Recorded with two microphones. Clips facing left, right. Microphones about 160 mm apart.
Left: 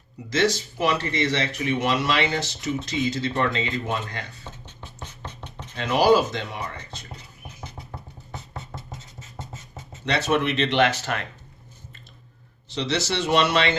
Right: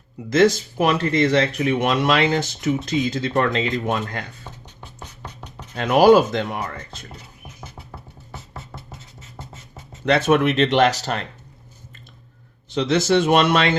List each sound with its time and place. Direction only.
0.3 s speech: 50° right (ahead or behind)
4.8 s scratch: 10° right (ahead or behind)
5.7 s speech: 55° right (ahead or behind)
7.9 s music: centre (ahead or behind)
10.1 s speech: 50° right (ahead or behind); by 11.3 s 35° right (ahead or behind)
12.6 s speech: 50° right (ahead or behind)